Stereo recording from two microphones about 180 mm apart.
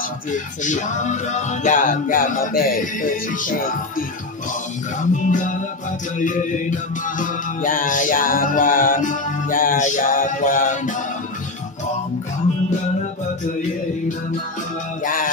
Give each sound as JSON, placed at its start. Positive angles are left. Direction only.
{"t": 0.3, "sound": "music", "side_deg": 45}
{"t": 5.1, "sound": "music", "side_deg": 45}
{"t": 15.0, "sound": "music", "side_deg": 50}